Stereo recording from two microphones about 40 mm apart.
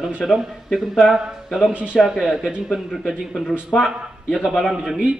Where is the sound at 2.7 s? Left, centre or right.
Centre.